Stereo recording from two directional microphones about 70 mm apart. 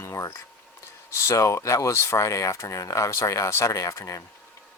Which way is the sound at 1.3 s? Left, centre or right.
Left.